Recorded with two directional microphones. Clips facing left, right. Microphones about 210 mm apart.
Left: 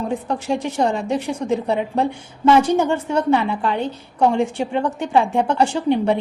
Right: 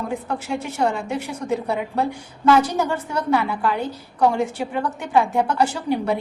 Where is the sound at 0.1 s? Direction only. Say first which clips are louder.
Left 4 dB; 30° left (ahead or behind).